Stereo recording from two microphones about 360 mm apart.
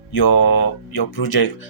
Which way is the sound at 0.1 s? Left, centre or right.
Left.